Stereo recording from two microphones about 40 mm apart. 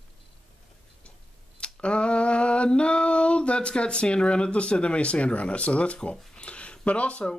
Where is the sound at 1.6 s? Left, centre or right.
Left.